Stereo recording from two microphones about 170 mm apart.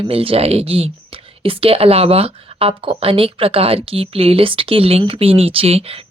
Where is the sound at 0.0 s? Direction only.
35° right (ahead or behind).